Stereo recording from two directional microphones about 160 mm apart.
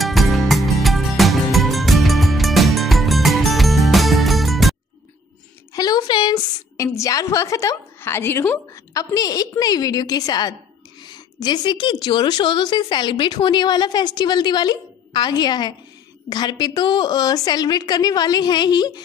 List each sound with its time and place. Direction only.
0.0 s music: centre (ahead or behind)
5.7 s a woman's voice: 25° left (ahead or behind)